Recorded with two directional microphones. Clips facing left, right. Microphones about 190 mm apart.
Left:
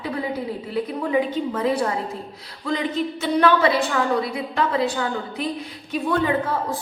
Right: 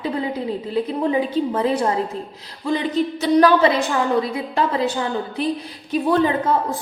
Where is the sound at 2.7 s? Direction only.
40° right (ahead or behind).